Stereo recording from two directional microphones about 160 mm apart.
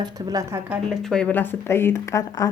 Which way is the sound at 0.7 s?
Centre (ahead or behind).